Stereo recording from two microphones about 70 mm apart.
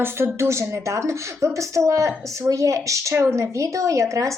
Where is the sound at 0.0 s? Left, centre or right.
Right.